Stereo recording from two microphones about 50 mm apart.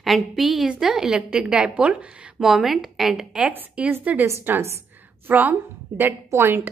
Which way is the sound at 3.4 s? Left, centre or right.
Right.